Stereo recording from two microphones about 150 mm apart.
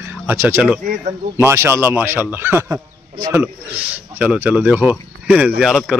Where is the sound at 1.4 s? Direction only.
15° right (ahead or behind); by 5.9 s centre (ahead or behind).